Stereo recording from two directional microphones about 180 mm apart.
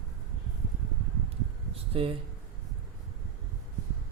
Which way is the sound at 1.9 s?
30° right (ahead or behind).